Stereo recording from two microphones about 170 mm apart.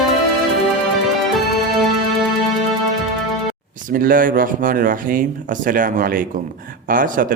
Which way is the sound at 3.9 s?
60° right (ahead or behind).